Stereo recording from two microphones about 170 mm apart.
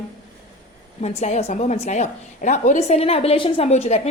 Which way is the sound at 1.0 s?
40° left (ahead or behind).